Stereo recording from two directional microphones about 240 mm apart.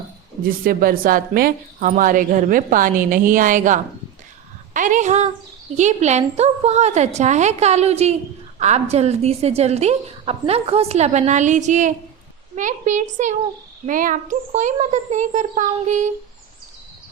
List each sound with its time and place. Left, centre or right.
0.4 s a woman's voice: right